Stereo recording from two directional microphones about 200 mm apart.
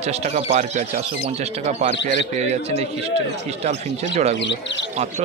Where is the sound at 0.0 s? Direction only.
35° right (ahead or behind).